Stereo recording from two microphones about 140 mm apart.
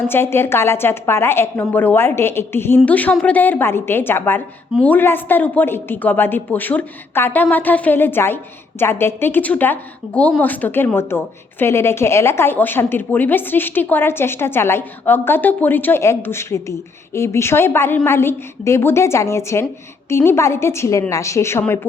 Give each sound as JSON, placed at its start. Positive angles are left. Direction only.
{"t": 0.1, "sound": "a woman's voice", "side_deg": 15}